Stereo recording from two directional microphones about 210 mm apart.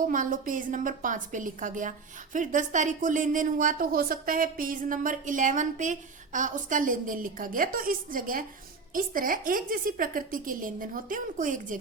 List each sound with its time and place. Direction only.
0.1 s speech: 40° right (ahead or behind)